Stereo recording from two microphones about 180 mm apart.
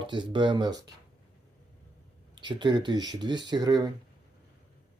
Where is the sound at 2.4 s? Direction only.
25° right (ahead or behind).